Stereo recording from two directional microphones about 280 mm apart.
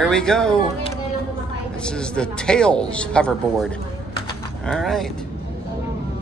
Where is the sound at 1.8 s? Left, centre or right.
Centre.